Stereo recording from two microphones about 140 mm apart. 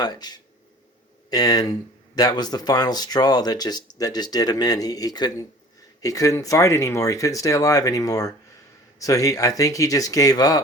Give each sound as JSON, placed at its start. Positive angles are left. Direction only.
{"t": 0.0, "sound": "speech", "side_deg": 30}